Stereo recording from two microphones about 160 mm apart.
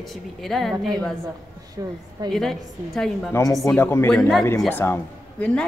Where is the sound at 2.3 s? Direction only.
Centre (ahead or behind).